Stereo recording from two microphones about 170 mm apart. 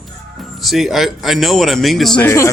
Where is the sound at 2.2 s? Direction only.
15° left (ahead or behind).